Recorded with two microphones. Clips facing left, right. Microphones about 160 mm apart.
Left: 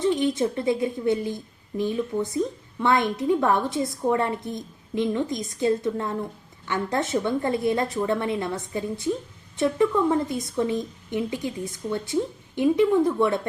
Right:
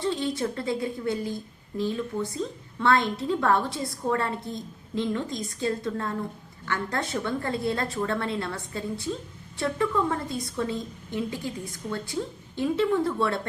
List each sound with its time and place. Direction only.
0.0 s a woman's voice: 20° left (ahead or behind)